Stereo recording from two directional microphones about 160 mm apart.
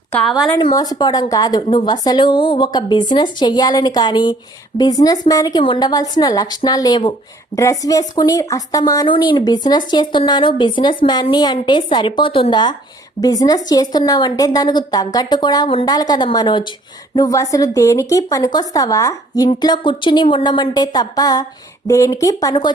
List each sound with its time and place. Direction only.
0.1 s a woman's voice: centre (ahead or behind)
0.6 s speech: 25° left (ahead or behind)